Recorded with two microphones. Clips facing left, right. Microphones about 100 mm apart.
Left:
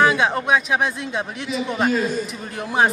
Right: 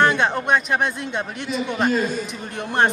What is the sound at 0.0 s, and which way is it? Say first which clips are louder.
Speech: left 1 dB; centre (ahead or behind).